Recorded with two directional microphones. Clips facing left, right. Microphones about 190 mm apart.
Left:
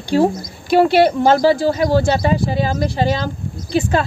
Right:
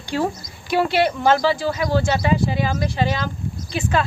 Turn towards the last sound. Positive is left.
turn(degrees=35)  # may be behind; listen again after turning